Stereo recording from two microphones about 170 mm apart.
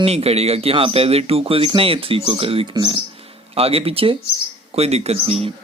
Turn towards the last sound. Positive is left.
turn(degrees=-35)  # may be behind; listen again after turning